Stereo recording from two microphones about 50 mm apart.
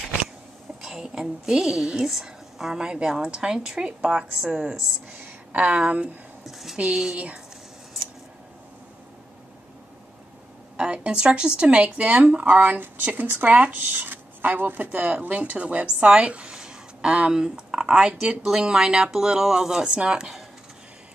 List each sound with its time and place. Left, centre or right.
0.8 s speech: centre
4.0 s speech: right
6.4 s speech: centre
6.8 s speech: centre
10.8 s speech: centre
12.5 s speech: right
13.9 s speech: right; by 20.3 s centre